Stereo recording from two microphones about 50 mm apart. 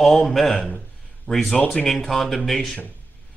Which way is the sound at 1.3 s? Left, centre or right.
Left.